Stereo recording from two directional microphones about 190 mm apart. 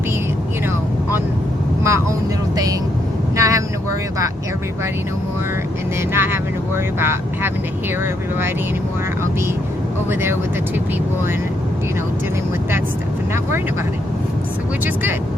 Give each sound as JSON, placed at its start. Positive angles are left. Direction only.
{"t": 1.8, "sound": "speech", "side_deg": -15}
{"t": 3.3, "sound": "vehicle", "side_deg": -15}
{"t": 6.1, "sound": "speech", "side_deg": -10}
{"t": 10.1, "sound": "speech", "side_deg": -10}